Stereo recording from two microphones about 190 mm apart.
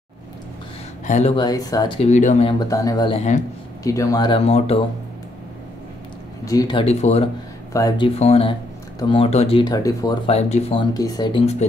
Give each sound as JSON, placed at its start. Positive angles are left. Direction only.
{"t": 1.0, "sound": "speech", "side_deg": 40}
{"t": 1.3, "sound": "speech", "side_deg": 20}
{"t": 2.6, "sound": "speech", "side_deg": 20}
{"t": 6.4, "sound": "speech", "side_deg": 20}
{"t": 7.7, "sound": "speech", "side_deg": 20}
{"t": 8.2, "sound": "speech", "side_deg": 30}